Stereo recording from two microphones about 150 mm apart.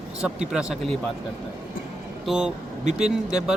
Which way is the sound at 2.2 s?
5° right (ahead or behind).